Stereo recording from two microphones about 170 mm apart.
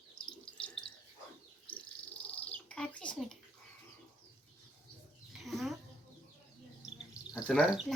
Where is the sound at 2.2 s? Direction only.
5° left (ahead or behind).